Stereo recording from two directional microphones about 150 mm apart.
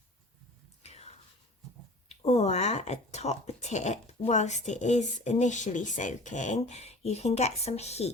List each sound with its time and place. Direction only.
0.8 s whispering: 45° left (ahead or behind)
2.0 s a woman's voice: 45° left (ahead or behind)